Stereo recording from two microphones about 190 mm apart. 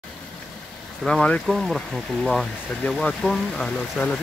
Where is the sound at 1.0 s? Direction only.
5° left (ahead or behind).